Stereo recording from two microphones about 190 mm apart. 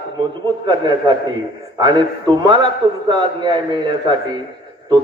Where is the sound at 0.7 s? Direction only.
25° right (ahead or behind).